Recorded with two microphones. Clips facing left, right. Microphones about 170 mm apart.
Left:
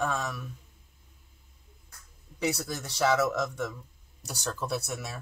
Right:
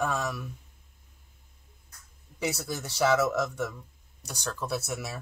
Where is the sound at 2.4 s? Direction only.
5° right (ahead or behind).